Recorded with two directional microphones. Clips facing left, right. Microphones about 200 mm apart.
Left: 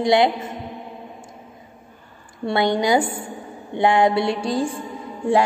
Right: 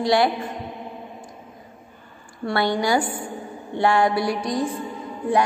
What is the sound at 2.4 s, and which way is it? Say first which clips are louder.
Music: left 2 dB; 20° left (ahead or behind).